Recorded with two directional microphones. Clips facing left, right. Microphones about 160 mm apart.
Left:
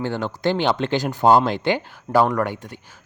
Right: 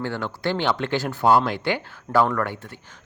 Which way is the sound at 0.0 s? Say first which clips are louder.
Left 4 dB; 20° left (ahead or behind).